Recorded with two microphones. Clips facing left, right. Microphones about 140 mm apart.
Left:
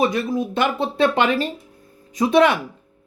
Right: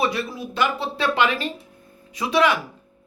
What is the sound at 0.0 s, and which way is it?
Speech, 50° left (ahead or behind).